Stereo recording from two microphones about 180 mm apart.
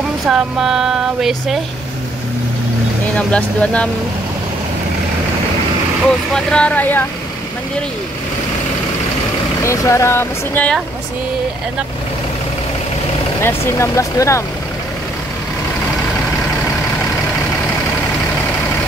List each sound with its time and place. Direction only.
0.3 s speech: centre (ahead or behind)
3.2 s speech: 5° left (ahead or behind)
6.3 s speech: 5° left (ahead or behind)
9.6 s speech: 15° left (ahead or behind)
13.4 s speech: 15° left (ahead or behind)